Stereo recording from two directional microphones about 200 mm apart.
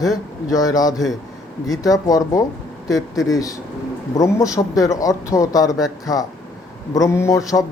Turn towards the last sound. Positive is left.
turn(degrees=15)  # may be behind; listen again after turning